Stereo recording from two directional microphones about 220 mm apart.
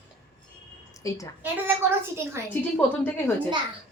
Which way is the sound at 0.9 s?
15° left (ahead or behind).